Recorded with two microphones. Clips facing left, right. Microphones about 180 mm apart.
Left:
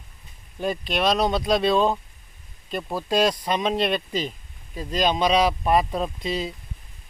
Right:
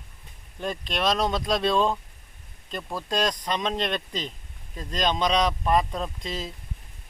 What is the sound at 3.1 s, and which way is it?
Speech, 10° left (ahead or behind).